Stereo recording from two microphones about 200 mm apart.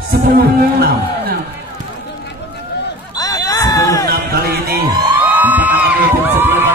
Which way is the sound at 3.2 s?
15° left (ahead or behind).